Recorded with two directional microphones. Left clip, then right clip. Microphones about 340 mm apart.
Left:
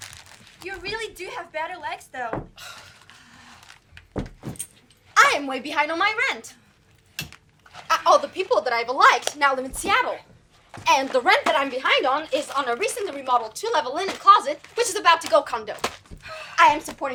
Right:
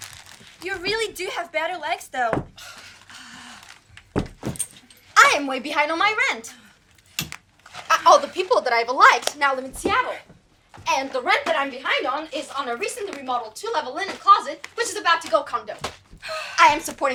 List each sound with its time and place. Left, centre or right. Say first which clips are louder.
0.6 s speech: right 6 dB; right
2.6 s a sound: left 1 dB; centre
5.1 s speech: right 2 dB; centre
7.7 s speech: right 3 dB; centre
10.7 s a woman's voice: left 4 dB; left
16.2 s a sound: right 7 dB; right
16.6 s a woman's voice: right 1 dB; centre